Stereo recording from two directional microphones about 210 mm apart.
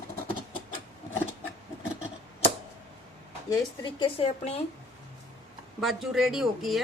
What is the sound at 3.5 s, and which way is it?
A woman's voice, 20° left (ahead or behind).